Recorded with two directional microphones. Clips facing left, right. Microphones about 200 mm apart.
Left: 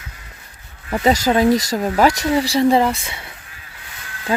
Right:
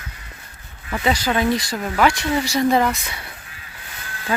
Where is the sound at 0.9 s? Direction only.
35° left (ahead or behind).